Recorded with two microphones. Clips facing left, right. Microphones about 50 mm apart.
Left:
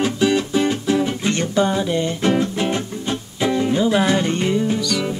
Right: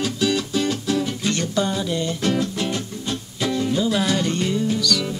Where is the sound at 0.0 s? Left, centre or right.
Left.